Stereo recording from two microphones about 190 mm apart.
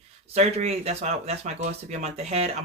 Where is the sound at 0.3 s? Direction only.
35° right (ahead or behind).